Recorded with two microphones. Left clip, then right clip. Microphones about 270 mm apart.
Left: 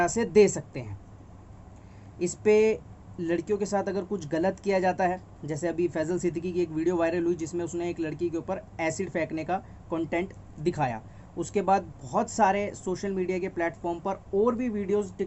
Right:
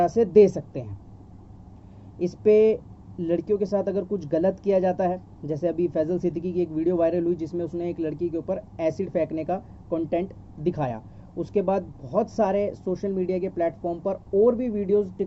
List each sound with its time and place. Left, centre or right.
0.0 s speech: centre
2.1 s speech: centre